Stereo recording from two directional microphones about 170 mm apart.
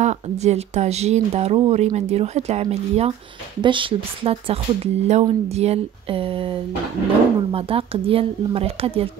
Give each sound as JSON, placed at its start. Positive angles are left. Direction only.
{"t": 0.0, "sound": "speech", "side_deg": -40}